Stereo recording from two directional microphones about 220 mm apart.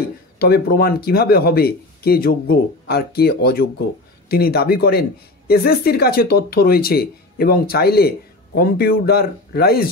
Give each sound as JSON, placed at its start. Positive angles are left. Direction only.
{"t": 0.4, "sound": "speech", "side_deg": 45}